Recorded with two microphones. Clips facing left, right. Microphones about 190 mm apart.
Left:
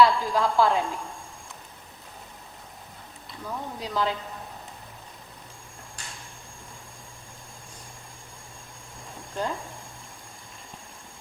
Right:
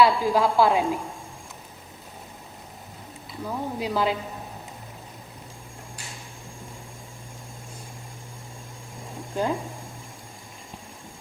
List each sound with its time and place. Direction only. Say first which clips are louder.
0.0 s a woman's voice: right 1 dB; 10° right (ahead or behind)
3.4 s a woman's voice: right 5 dB; 10° right (ahead or behind)
9.3 s speech: right 5 dB; 10° right (ahead or behind)